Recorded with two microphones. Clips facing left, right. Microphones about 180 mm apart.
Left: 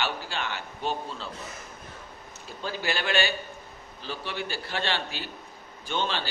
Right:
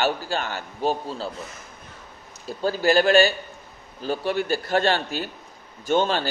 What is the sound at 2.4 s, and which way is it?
A man's voice, 40° right (ahead or behind).